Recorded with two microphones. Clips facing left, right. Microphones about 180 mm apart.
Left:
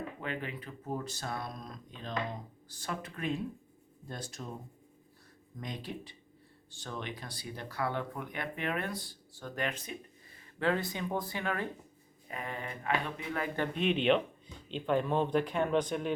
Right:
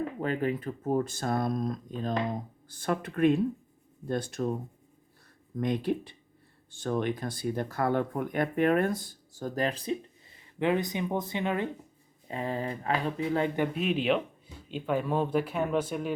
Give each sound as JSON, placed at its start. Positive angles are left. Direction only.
{"t": 0.2, "sound": "speech", "side_deg": -40}
{"t": 5.5, "sound": "speech", "side_deg": -55}
{"t": 10.6, "sound": "speech", "side_deg": -20}
{"t": 12.3, "sound": "speech", "side_deg": -30}
{"t": 13.6, "sound": "speech", "side_deg": -5}